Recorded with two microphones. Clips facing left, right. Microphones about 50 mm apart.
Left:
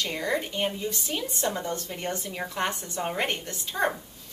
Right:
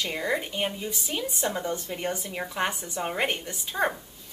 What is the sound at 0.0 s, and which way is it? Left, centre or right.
A woman's voice, centre.